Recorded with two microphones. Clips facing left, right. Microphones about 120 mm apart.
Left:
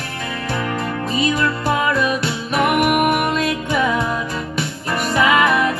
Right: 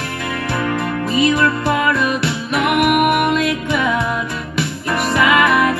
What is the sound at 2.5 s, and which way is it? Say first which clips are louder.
Music: right 1 dB; 40° left (ahead or behind).